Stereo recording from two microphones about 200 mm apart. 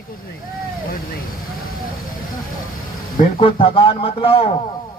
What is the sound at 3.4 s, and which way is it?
A man's voice, 30° left (ahead or behind).